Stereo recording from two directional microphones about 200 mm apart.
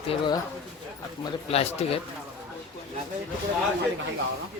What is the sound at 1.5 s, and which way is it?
Speech, 30° left (ahead or behind).